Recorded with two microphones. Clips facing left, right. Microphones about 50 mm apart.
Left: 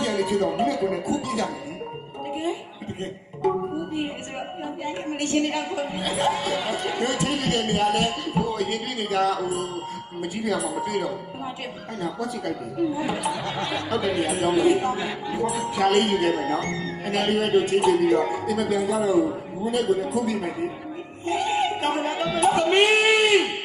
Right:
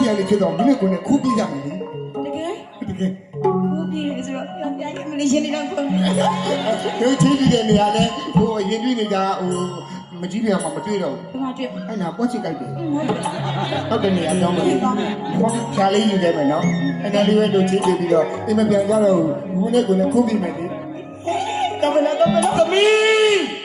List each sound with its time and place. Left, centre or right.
0.0 s speech: centre
5.1 s speech: centre
14.0 s speech: centre
16.6 s speech: centre
21.2 s music: centre